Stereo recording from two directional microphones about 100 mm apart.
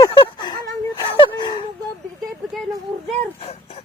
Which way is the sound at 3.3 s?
85° left.